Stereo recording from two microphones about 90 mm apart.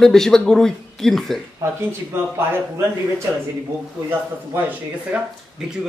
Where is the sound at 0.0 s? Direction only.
5° left (ahead or behind).